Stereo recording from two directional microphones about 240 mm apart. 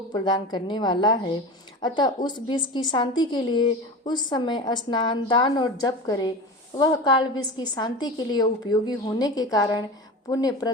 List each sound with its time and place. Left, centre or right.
0.1 s a woman's voice: centre